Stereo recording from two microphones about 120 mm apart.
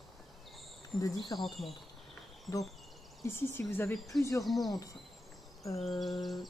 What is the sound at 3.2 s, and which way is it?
Speech, 20° left (ahead or behind).